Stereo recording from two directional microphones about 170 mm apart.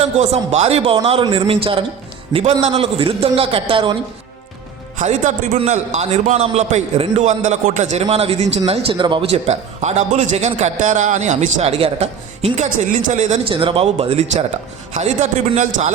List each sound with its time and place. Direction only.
0.0 s a man's voice: 40° right (ahead or behind)
4.9 s a man's voice: 45° right (ahead or behind)
9.5 s a man's voice: 40° right (ahead or behind)